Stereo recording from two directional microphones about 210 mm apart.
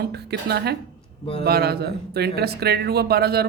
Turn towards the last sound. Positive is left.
turn(degrees=-50)  # may be behind; listen again after turning